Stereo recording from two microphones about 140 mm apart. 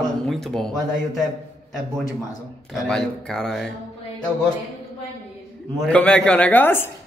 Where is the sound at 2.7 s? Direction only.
5° left (ahead or behind).